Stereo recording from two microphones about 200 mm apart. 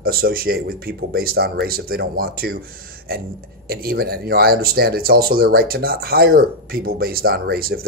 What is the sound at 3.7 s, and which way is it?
Speech, 50° right (ahead or behind).